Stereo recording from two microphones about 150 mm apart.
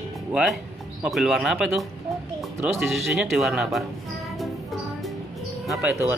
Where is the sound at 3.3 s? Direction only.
5° right (ahead or behind).